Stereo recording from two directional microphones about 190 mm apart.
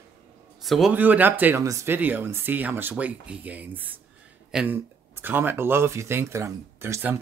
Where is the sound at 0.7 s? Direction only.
Centre (ahead or behind).